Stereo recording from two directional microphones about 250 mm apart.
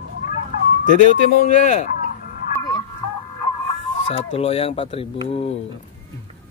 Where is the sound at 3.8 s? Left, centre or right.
Left.